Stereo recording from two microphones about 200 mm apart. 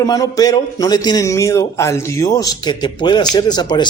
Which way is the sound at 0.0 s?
20° left (ahead or behind).